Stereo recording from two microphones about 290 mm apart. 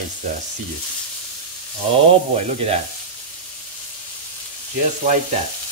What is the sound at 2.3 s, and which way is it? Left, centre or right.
Frying, right.